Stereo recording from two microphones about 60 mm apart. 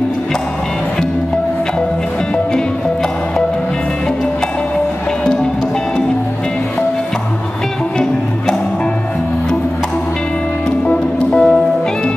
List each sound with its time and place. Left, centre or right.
5.2 s music: centre
10.9 s music: centre